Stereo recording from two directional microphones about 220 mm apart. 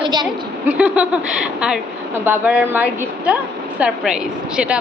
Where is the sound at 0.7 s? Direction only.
5° right (ahead or behind).